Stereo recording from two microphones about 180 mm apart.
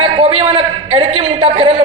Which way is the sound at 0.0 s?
35° right (ahead or behind).